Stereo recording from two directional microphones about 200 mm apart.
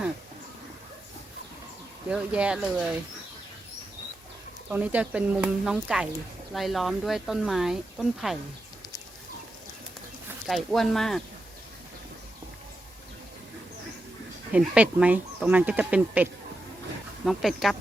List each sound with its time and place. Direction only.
2.0 s speech: 5° right (ahead or behind)
4.7 s speech: 5° right (ahead or behind)
10.4 s speech: centre (ahead or behind)
14.5 s speech: 5° right (ahead or behind)